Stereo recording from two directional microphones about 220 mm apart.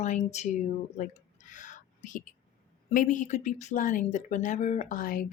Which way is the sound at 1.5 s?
35° left (ahead or behind).